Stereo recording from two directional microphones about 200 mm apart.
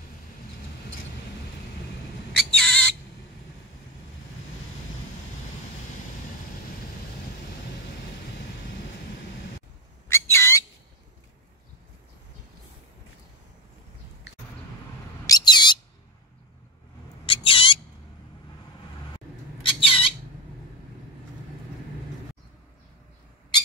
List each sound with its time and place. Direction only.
2.3 s a sound: centre (ahead or behind)
10.0 s whistle: 15° left (ahead or behind)
15.2 s bird: 20° left (ahead or behind)
17.3 s bird: 25° left (ahead or behind)
19.1 s squawk: 25° left (ahead or behind)